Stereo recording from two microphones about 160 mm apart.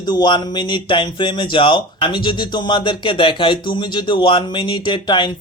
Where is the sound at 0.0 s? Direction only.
25° left (ahead or behind).